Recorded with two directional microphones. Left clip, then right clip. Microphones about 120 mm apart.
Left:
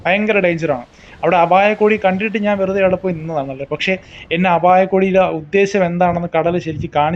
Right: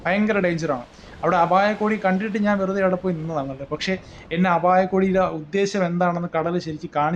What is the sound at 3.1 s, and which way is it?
Speech, centre (ahead or behind).